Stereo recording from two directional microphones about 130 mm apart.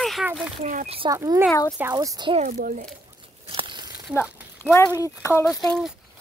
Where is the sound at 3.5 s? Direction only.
40° right (ahead or behind).